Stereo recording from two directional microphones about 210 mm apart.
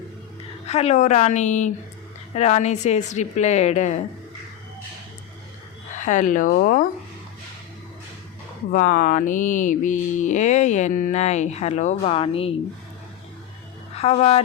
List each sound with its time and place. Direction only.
0.7 s mantra: 30° left (ahead or behind)
6.0 s mantra: 35° left (ahead or behind)
8.7 s mantra: 40° left (ahead or behind)
13.9 s speech: 30° left (ahead or behind)